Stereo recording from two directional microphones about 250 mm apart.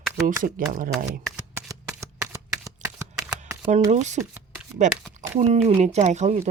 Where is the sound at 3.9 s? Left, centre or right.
Right.